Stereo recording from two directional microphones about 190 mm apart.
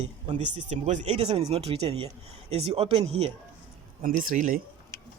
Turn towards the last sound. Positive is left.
turn(degrees=-45)  # may be behind; listen again after turning